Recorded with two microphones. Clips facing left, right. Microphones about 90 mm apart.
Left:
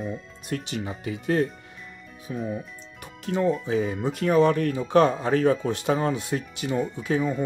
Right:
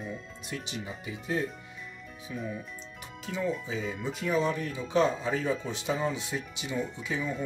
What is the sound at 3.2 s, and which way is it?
Speech, 60° left (ahead or behind).